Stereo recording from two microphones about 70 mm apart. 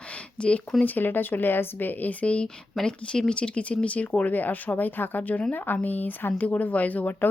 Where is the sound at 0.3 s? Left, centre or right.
Centre.